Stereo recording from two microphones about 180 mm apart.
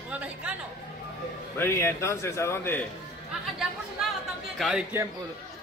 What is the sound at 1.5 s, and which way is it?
Speech, 15° left (ahead or behind).